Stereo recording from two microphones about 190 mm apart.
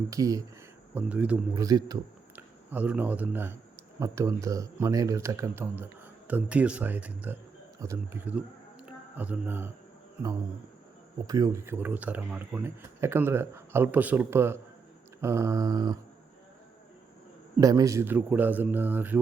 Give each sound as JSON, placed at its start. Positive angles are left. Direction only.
{"t": 0.1, "sound": "speech", "side_deg": -15}
{"t": 0.9, "sound": "speech", "side_deg": -5}
{"t": 1.6, "sound": "a man's voice", "side_deg": -20}
{"t": 11.3, "sound": "speech", "side_deg": -20}
{"t": 15.2, "sound": "a sound", "side_deg": -15}
{"t": 17.6, "sound": "speech", "side_deg": -20}